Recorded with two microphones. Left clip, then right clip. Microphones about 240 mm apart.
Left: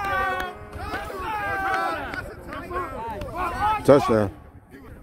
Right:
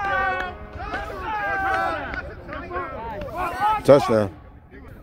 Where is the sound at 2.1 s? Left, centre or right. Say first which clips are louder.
Right 1 dB; left.